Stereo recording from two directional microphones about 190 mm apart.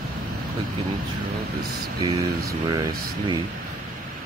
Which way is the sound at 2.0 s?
20° right (ahead or behind).